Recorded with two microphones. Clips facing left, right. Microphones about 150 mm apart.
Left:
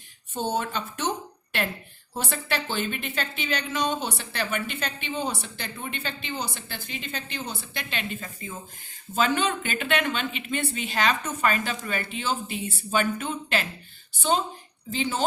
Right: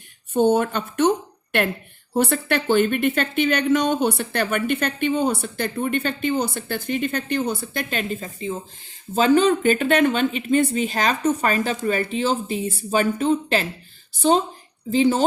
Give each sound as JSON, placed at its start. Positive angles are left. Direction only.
{"t": 0.3, "sound": "speech", "side_deg": -55}
{"t": 2.1, "sound": "speech", "side_deg": -55}
{"t": 8.2, "sound": "speech", "side_deg": -25}